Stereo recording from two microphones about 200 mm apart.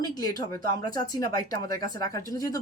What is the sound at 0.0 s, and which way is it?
A woman's voice, 20° left (ahead or behind).